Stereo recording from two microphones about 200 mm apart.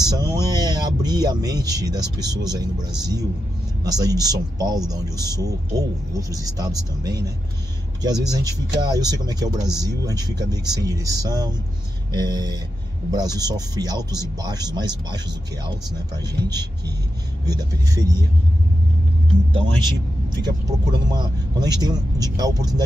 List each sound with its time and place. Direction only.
0.0 s speech: 20° right (ahead or behind)
19.5 s speech: 20° right (ahead or behind)